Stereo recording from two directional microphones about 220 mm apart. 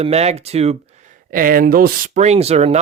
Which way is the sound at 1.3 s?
40° right (ahead or behind).